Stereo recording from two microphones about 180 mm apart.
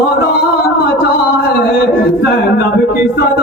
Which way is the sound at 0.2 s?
60° left (ahead or behind).